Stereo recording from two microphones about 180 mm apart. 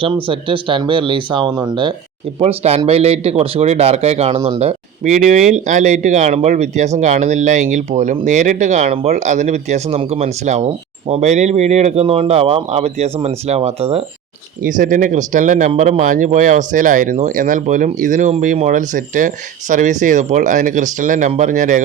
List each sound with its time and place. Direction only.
0.0 s speech: 30° right (ahead or behind)
14.6 s speech: 45° right (ahead or behind)